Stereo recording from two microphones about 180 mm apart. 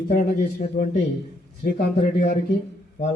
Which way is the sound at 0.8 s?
45° left (ahead or behind).